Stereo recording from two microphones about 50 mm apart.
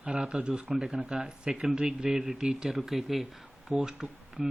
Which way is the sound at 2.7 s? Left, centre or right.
Centre.